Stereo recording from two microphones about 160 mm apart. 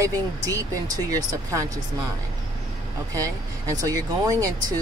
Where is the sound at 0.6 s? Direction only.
20° right (ahead or behind).